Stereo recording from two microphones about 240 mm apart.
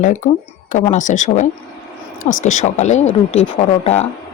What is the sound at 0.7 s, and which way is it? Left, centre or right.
Speech, left.